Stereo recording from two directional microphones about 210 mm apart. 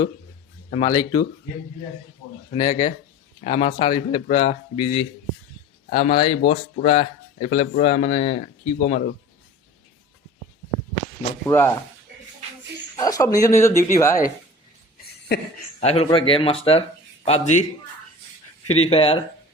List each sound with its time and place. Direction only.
0.7 s speech: 30° left (ahead or behind)
2.5 s speech: 20° left (ahead or behind)
11.4 s speech: 15° left (ahead or behind)
13.0 s speech: 15° left (ahead or behind)
15.8 s a man's voice: 30° left (ahead or behind)
18.9 s speech: 25° left (ahead or behind)